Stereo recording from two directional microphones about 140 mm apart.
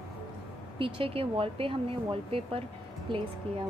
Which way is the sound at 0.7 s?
40° right (ahead or behind).